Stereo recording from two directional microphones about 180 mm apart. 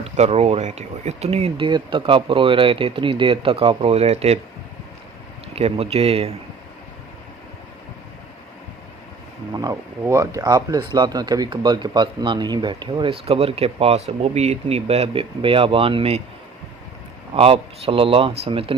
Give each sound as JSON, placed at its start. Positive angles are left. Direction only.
{"t": 0.0, "sound": "speech", "side_deg": -35}
{"t": 5.5, "sound": "speech", "side_deg": -35}
{"t": 9.6, "sound": "speech", "side_deg": -20}
{"t": 17.3, "sound": "speech", "side_deg": -30}